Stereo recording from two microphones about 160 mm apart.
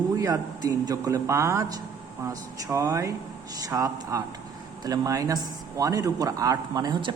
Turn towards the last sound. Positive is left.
turn(degrees=-25)  # may be behind; listen again after turning